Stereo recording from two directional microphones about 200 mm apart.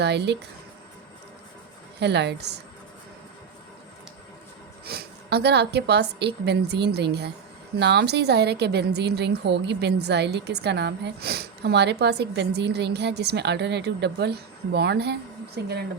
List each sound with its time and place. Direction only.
0.0 s a woman's voice: 60° right (ahead or behind)
2.0 s a woman's voice: 55° right (ahead or behind)
4.9 s a woman's voice: 55° right (ahead or behind)